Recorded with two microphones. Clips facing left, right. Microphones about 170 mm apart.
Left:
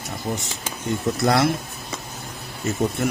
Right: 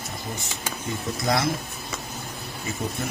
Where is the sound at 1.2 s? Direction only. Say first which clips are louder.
Left 5 dB; 65° left (ahead or behind).